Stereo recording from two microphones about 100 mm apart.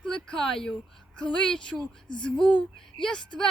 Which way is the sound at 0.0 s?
5° left (ahead or behind).